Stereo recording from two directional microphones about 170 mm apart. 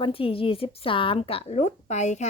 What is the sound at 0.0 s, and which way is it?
A woman's voice, 35° left (ahead or behind).